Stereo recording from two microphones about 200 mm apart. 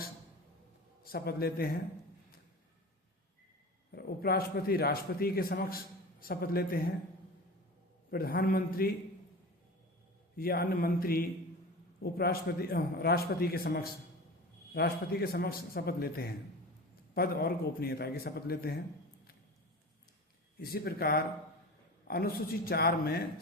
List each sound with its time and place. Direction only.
1.0 s a man's voice: 50° left (ahead or behind)
3.9 s a man's voice: 50° left (ahead or behind)
8.1 s a man's voice: 50° left (ahead or behind)
10.3 s a man's voice: 50° left (ahead or behind)
20.6 s a man's voice: 50° left (ahead or behind)